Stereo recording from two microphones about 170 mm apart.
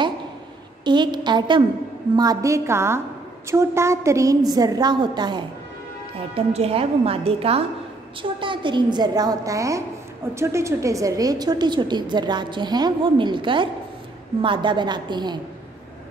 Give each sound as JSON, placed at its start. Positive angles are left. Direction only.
{"t": 0.8, "sound": "a woman's voice", "side_deg": -25}